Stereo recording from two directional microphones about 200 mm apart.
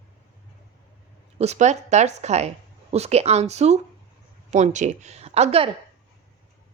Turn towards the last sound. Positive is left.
turn(degrees=-30)  # may be behind; listen again after turning